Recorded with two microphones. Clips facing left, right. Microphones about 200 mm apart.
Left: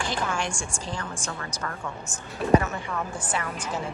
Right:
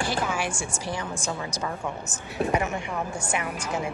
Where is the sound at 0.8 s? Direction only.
10° right (ahead or behind).